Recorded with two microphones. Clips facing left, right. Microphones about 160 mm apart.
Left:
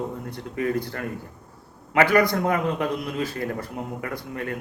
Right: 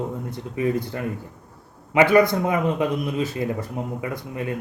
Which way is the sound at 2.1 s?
20° right (ahead or behind).